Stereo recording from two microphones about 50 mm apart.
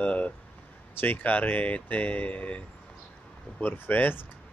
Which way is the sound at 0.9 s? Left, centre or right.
Left.